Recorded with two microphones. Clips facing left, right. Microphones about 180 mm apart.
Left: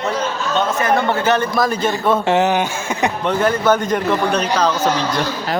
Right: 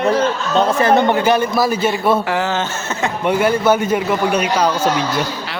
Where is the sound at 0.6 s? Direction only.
30° right (ahead or behind).